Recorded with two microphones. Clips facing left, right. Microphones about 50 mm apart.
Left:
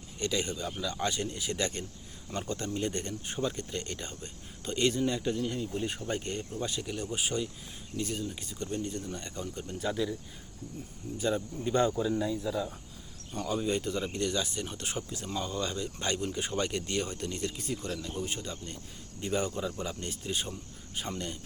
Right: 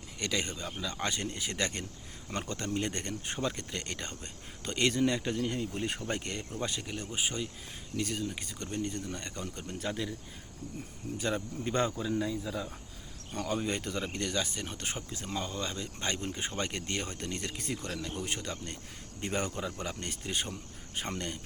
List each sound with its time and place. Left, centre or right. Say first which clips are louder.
0.2 s speech: left 2 dB; right
6.6 s speech: left 2 dB; right
7.9 s speech: even; right
11.0 s speech: right 1 dB; right
11.3 s speech: left 3 dB; right
11.9 s a man's voice: left 2 dB; centre
13.4 s speech: left 2 dB; right
15.4 s speech: left 3 dB; right